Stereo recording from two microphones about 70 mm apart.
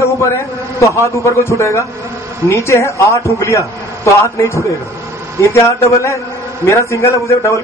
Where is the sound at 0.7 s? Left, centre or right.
Left.